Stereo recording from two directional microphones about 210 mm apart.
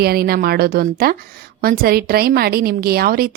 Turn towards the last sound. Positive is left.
turn(degrees=-45)  # may be behind; listen again after turning